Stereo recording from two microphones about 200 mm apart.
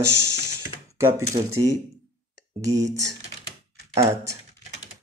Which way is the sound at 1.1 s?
15° right (ahead or behind).